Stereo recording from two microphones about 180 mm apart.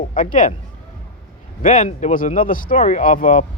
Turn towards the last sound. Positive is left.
turn(degrees=45)  # may be behind; listen again after turning